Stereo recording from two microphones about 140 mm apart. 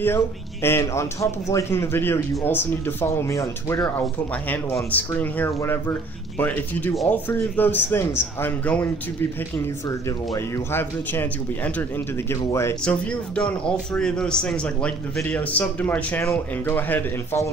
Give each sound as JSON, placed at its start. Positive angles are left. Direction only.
{"t": 0.0, "sound": "a man's voice", "side_deg": 15}
{"t": 3.8, "sound": "a man's voice", "side_deg": 10}
{"t": 9.8, "sound": "a man's voice", "side_deg": 25}
{"t": 12.8, "sound": "a man's voice", "side_deg": 5}